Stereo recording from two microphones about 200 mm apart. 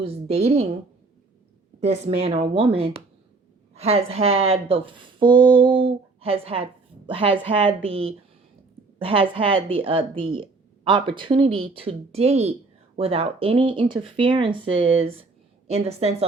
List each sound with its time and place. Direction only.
0.0 s a woman's voice: 30° right (ahead or behind)
1.8 s speech: 30° right (ahead or behind)